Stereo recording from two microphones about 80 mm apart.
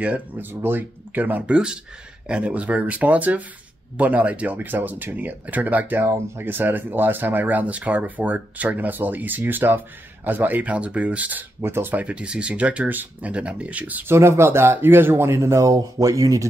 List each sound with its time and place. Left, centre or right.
0.0 s speech: right
12.0 s speech: centre
14.1 s speech: right